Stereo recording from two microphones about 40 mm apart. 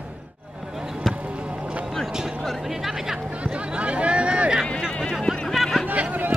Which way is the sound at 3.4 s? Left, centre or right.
Right.